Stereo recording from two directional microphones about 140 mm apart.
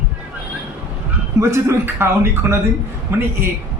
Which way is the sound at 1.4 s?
20° right (ahead or behind).